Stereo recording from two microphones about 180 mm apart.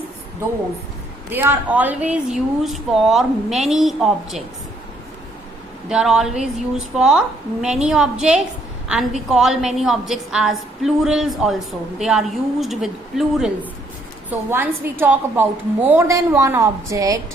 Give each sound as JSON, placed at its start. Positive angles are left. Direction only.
{"t": 1.3, "sound": "a woman's voice", "side_deg": -10}
{"t": 5.9, "sound": "a woman's voice", "side_deg": -5}